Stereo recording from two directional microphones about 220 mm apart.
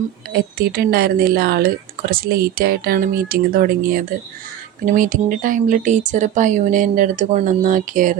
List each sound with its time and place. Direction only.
0.3 s speech: 45° right (ahead or behind)